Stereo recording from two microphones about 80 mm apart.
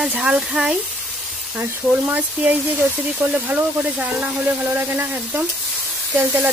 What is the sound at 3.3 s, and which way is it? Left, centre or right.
Speech, centre.